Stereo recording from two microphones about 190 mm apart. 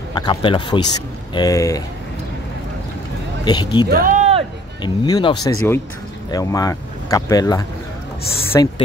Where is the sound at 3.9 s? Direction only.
40° right (ahead or behind).